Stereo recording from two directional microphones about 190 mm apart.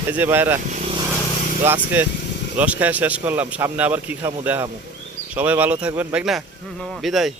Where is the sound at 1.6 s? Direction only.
10° right (ahead or behind).